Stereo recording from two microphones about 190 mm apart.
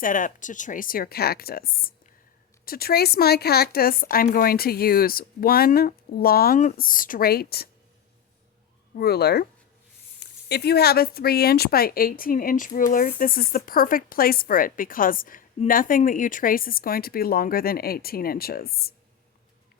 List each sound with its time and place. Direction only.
0.0 s a woman's voice: 45° left (ahead or behind)
9.0 s speech: 55° left (ahead or behind)
10.5 s a woman's voice: 55° left (ahead or behind)